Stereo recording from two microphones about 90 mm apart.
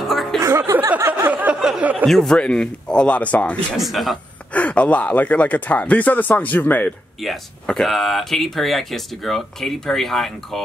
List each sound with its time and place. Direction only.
0.1 s music: centre (ahead or behind)
0.4 s a sound: 30° right (ahead or behind)
1.3 s a sound: 15° right (ahead or behind)
2.0 s speech: 5° left (ahead or behind)
3.7 s speech: centre (ahead or behind)
4.6 s speech: 15° left (ahead or behind)
7.2 s speech: 5° left (ahead or behind)